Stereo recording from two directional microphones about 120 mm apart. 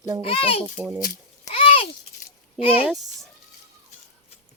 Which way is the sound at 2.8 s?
Centre (ahead or behind).